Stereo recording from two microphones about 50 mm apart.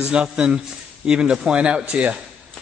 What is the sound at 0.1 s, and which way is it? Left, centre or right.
A man's voice, centre.